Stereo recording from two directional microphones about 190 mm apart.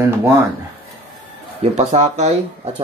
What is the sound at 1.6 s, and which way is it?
Speech, 35° right (ahead or behind).